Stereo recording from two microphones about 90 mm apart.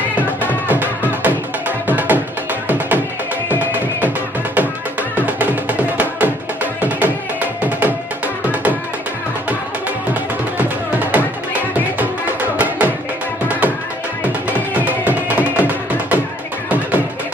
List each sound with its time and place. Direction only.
0.4 s music: 20° right (ahead or behind)
4.5 s music: 20° right (ahead or behind)
10.6 s music: 20° right (ahead or behind)
12.5 s music: 15° right (ahead or behind)